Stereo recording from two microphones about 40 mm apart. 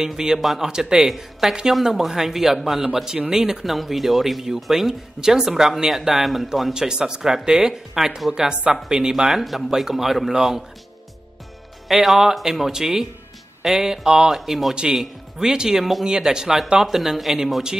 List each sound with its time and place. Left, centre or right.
0.0 s speech: centre
0.7 s speech: centre
6.7 s speech: centre
9.1 s speech: centre
11.9 s speech: centre
14.0 s speech: centre
14.3 s speech: centre
15.8 s speech: centre